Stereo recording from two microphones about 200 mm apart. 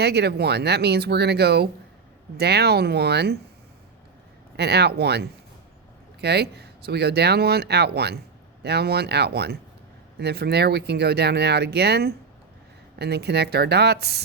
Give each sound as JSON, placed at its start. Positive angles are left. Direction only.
{"t": 0.0, "sound": "speech", "side_deg": -55}
{"t": 4.5, "sound": "speech", "side_deg": -55}